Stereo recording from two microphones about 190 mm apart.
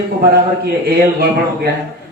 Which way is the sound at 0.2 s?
55° right (ahead or behind).